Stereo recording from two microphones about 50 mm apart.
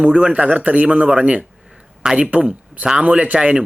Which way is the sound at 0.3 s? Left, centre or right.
Right.